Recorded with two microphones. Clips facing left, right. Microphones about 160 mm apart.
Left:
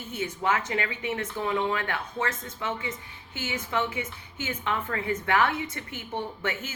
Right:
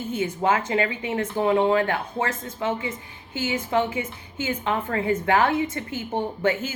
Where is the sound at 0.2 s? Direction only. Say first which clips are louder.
Right 4 dB; 30° right (ahead or behind).